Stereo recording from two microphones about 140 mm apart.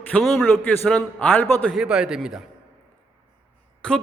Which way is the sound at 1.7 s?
5° right (ahead or behind).